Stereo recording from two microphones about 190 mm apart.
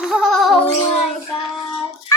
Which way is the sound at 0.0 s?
5° right (ahead or behind).